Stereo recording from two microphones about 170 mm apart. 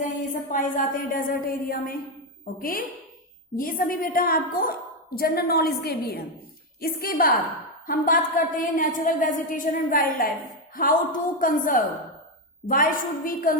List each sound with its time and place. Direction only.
0.5 s a woman's voice: 50° left (ahead or behind)